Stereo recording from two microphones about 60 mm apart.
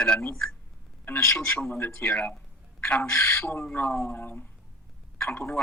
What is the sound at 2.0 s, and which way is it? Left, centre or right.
Speech, centre.